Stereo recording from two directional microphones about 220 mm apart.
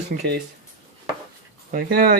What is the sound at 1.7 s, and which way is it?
Speech, 40° right (ahead or behind).